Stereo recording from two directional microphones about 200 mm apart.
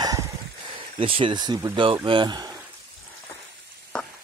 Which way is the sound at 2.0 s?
25° right (ahead or behind).